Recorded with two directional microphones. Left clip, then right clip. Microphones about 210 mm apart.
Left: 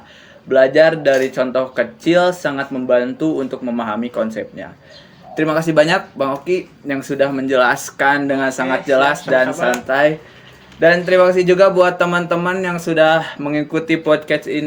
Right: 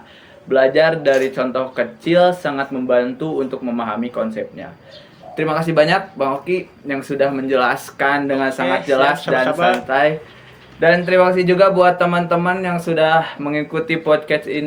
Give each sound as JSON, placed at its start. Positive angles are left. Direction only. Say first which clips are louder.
{"t": 0.4, "sound": "speech", "louder": "left 2 dB", "side_deg": 50}